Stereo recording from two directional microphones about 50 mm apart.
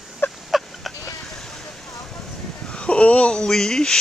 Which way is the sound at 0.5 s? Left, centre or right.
Centre.